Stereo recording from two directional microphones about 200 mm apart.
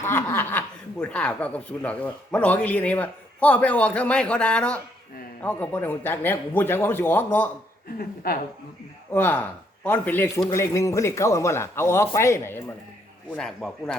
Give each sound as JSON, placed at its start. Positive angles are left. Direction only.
{"t": 0.0, "sound": "speech", "side_deg": 10}
{"t": 7.9, "sound": "a woman's voice", "side_deg": 50}
{"t": 9.1, "sound": "a man's voice", "side_deg": 10}